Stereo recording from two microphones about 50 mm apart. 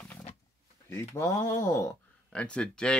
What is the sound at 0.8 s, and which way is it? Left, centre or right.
Speech, left.